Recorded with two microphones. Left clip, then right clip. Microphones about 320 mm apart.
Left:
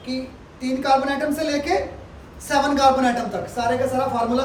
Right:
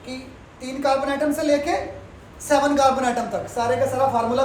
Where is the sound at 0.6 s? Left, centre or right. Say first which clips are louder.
Left 2 dB; centre.